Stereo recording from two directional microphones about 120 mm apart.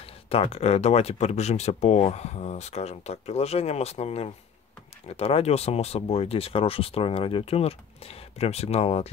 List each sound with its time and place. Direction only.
0.0 s speech: 55° left (ahead or behind)